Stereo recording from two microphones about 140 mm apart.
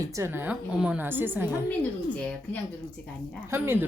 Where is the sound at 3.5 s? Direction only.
15° right (ahead or behind).